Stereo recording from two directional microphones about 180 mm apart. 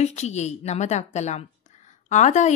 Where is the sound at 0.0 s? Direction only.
40° left (ahead or behind).